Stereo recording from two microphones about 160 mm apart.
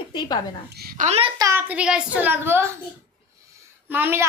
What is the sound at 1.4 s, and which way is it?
Child singing, 15° right (ahead or behind).